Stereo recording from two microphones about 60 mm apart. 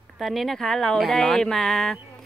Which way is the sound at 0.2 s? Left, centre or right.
Centre.